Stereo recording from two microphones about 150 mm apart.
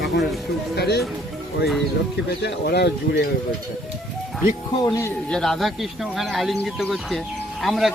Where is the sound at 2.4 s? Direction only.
90° left.